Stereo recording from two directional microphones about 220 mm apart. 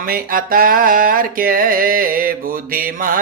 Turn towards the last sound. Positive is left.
turn(degrees=-40)  # may be behind; listen again after turning